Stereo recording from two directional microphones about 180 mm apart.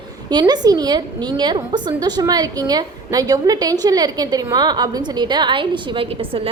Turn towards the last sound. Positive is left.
turn(degrees=-25)  # may be behind; listen again after turning